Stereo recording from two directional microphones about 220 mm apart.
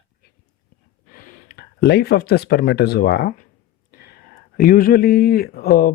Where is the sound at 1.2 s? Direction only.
45° left (ahead or behind).